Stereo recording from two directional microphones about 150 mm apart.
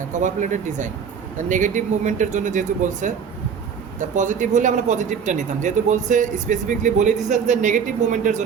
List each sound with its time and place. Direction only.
0.1 s speech: 55° right (ahead or behind)
4.1 s speech: 55° right (ahead or behind)